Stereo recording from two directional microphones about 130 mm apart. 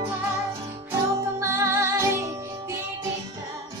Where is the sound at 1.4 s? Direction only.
20° right (ahead or behind).